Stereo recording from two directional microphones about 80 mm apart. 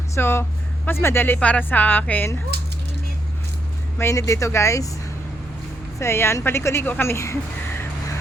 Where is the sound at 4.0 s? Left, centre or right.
Left.